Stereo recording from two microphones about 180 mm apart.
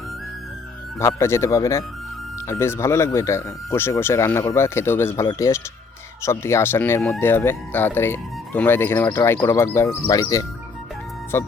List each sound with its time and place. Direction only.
0.9 s speech: 15° left (ahead or behind)